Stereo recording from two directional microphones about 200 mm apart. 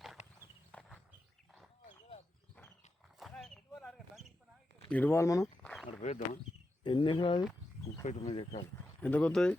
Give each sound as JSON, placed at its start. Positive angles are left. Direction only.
{"t": 0.2, "sound": "walk", "side_deg": 35}
{"t": 0.7, "sound": "walk", "side_deg": 5}
{"t": 3.2, "sound": "a sound", "side_deg": 0}
{"t": 4.9, "sound": "speech", "side_deg": 10}
{"t": 6.0, "sound": "speech", "side_deg": 35}
{"t": 6.8, "sound": "speech", "side_deg": 25}
{"t": 9.0, "sound": "speech", "side_deg": 5}